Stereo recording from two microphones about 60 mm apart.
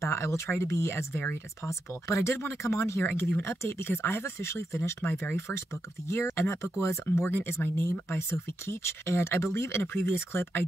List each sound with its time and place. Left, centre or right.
0.0 s speech: left
3.0 s speech: left
3.4 s speech: left
7.2 s speech: left